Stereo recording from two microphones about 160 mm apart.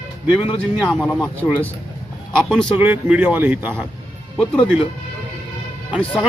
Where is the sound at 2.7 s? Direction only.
10° right (ahead or behind).